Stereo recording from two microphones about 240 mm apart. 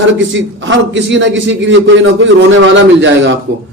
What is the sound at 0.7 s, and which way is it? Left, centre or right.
A man's voice, right.